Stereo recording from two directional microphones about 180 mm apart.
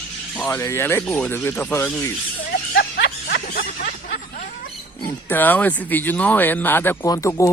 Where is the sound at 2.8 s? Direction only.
65° left (ahead or behind).